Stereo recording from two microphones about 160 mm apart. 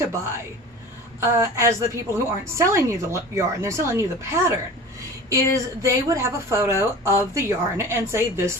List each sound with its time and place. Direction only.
0.0 s a woman's voice: 15° right (ahead or behind)